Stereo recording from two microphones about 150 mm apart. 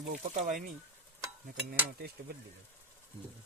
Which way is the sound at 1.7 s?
90° right.